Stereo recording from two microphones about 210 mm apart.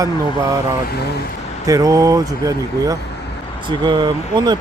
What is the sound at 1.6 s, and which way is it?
Speech, 15° right (ahead or behind).